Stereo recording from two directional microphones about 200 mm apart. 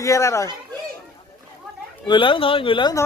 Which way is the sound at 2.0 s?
25° left (ahead or behind).